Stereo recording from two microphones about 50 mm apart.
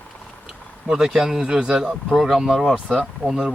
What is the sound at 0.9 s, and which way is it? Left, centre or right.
Speech, centre.